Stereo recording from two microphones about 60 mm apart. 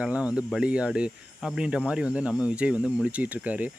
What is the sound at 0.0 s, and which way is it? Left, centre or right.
Speech, right.